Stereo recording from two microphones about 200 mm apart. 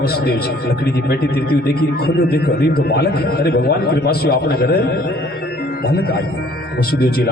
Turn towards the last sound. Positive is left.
turn(degrees=50)  # may be behind; listen again after turning